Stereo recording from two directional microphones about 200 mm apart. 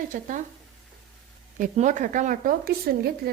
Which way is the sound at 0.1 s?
40° right (ahead or behind).